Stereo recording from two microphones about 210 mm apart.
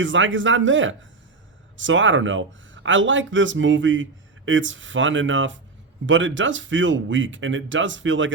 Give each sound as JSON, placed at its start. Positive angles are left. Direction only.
{"t": 0.0, "sound": "speech", "side_deg": -65}